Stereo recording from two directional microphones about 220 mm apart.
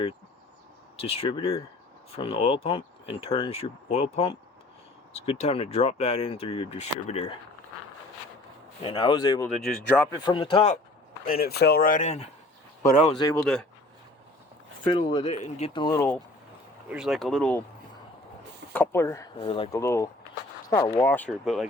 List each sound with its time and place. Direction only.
0.9 s speech: 25° left (ahead or behind)
8.8 s speech: 20° left (ahead or behind)
9.6 s speech: centre (ahead or behind)
10.2 s speech: 25° left (ahead or behind)
11.3 s speech: 45° left (ahead or behind); by 13.3 s 20° left (ahead or behind)
13.4 s speech: 5° left (ahead or behind)
14.8 s speech: 25° left (ahead or behind)
15.3 s speech: 35° left (ahead or behind); by 16.2 s 10° left (ahead or behind)
16.9 s speech: centre (ahead or behind)
18.7 s speech: 10° left (ahead or behind)
19.8 s speech: 10° left (ahead or behind)